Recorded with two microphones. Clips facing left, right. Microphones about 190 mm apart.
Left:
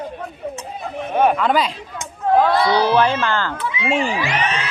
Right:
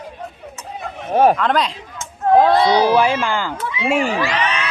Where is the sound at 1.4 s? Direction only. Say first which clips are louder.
Even; 5° left (ahead or behind).